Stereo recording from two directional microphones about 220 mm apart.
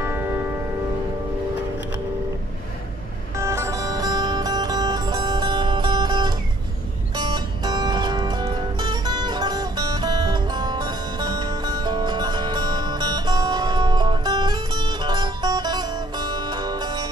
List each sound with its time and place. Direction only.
0.0 s music: 10° right (ahead or behind)
3.3 s music: 15° right (ahead or behind)